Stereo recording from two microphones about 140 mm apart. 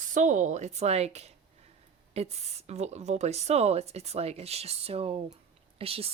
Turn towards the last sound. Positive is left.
turn(degrees=-40)  # may be behind; listen again after turning